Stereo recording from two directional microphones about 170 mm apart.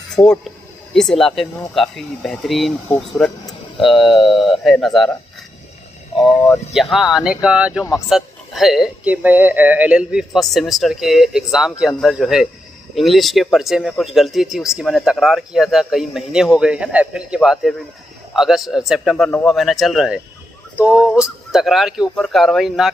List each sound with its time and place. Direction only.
0.2 s speech: 20° left (ahead or behind)
0.9 s speech: centre (ahead or behind)
6.7 s speech: centre (ahead or behind)